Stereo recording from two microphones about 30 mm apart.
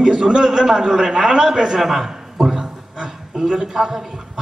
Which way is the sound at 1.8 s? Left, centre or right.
Centre.